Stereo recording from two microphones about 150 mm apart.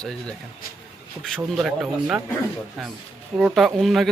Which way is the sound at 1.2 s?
Centre (ahead or behind).